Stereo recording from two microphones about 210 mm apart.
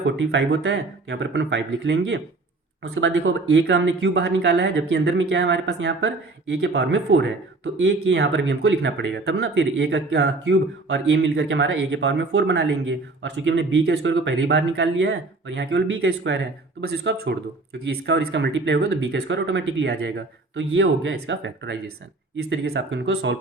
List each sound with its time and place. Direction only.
0.0 s speech: 55° right (ahead or behind)